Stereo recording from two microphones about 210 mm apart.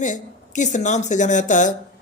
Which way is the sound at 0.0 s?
35° left (ahead or behind).